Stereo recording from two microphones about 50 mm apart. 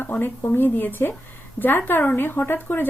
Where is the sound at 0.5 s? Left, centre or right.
Left.